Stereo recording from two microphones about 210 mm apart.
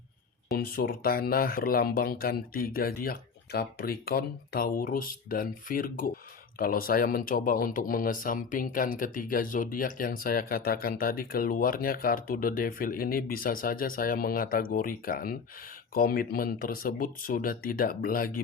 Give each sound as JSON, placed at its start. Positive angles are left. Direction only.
{"t": 0.5, "sound": "speech", "side_deg": 45}